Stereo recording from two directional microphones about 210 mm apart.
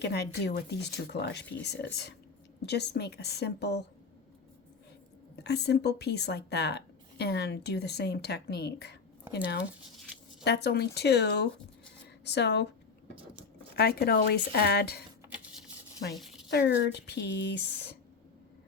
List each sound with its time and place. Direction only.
0.0 s speech: 50° left (ahead or behind)
5.4 s speech: 50° left (ahead or behind)
10.4 s speech: 50° left (ahead or behind)
13.7 s speech: 50° left (ahead or behind)
16.1 s a sound: centre (ahead or behind)
16.5 s speech: 50° left (ahead or behind)